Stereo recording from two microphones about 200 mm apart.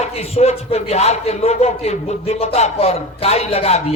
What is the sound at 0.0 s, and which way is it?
Speech, 30° left (ahead or behind).